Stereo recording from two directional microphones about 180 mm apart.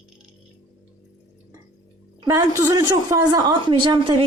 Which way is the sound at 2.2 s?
20° right (ahead or behind).